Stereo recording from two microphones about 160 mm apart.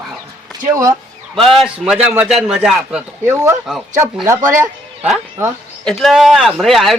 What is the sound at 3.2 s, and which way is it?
Speech, 15° right (ahead or behind).